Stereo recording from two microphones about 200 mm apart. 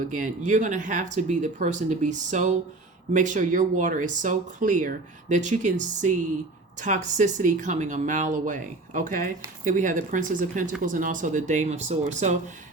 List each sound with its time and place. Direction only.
0.1 s speech: 40° right (ahead or behind)